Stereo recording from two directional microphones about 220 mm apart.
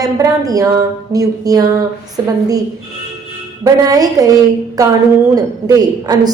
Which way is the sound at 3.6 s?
15° right (ahead or behind).